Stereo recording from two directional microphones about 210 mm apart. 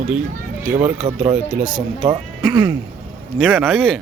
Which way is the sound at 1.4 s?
5° right (ahead or behind).